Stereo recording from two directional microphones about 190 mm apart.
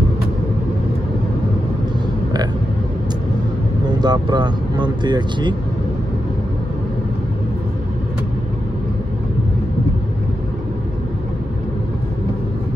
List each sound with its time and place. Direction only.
4.0 s speech: 20° right (ahead or behind)